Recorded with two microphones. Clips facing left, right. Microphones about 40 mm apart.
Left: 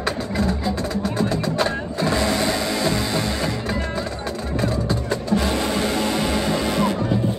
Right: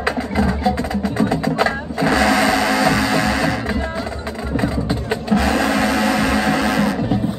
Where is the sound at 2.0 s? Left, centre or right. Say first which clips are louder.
Right 6 dB; right.